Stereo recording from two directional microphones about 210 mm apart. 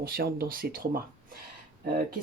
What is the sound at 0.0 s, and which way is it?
Speech, 45° right (ahead or behind).